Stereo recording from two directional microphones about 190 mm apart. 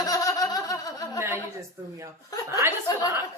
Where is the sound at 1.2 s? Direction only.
15° right (ahead or behind).